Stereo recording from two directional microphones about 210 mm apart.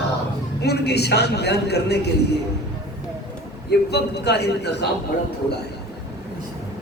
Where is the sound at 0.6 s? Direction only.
50° left (ahead or behind).